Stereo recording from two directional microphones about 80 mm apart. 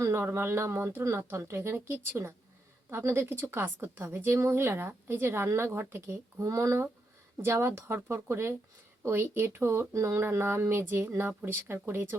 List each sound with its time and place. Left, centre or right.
0.0 s a woman's voice: right